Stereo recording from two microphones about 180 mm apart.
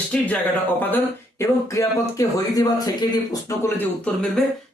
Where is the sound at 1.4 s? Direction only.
15° left (ahead or behind).